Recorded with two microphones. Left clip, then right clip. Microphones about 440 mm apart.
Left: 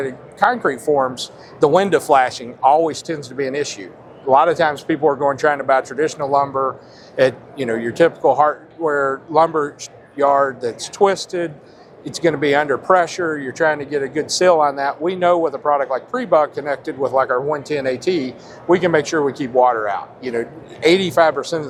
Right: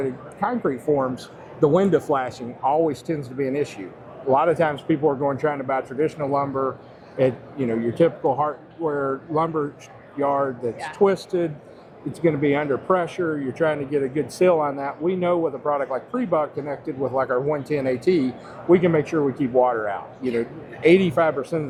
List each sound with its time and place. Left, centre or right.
0.0 s speech: left
1.1 s a man's voice: left
1.6 s speech: left
7.9 s speech: left
20.8 s a man's voice: left
21.2 s speech: left